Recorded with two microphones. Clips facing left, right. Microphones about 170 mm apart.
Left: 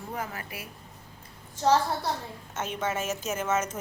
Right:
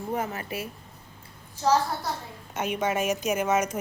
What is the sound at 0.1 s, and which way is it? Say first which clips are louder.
Speech: right 6 dB; 25° right (ahead or behind).